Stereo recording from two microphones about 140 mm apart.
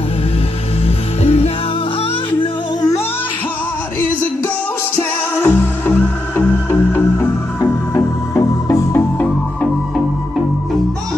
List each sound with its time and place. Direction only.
0.8 s music: 45° left (ahead or behind)
5.4 s music: 15° left (ahead or behind)